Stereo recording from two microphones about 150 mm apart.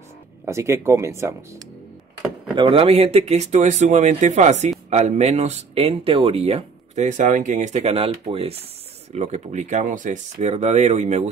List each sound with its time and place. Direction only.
0.5 s speech: 20° right (ahead or behind)
2.5 s speech: 35° right (ahead or behind)